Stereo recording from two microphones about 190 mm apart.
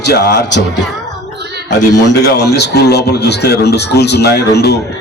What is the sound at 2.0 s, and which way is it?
A man's voice, 60° left (ahead or behind).